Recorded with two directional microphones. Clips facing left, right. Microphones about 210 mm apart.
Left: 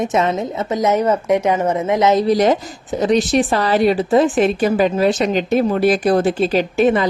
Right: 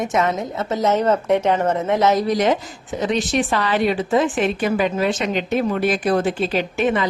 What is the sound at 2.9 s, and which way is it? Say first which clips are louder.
Speech: left 5 dB; 40° left (ahead or behind).